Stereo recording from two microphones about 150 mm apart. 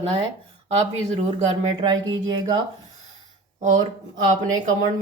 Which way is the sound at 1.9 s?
30° right (ahead or behind).